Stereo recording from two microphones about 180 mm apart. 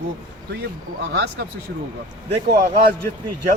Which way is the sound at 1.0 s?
70° right (ahead or behind).